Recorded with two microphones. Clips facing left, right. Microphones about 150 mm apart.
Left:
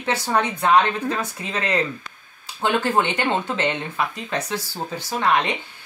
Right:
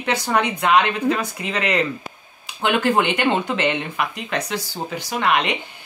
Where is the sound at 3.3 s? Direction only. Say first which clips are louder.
Right 2 dB; 70° right (ahead or behind).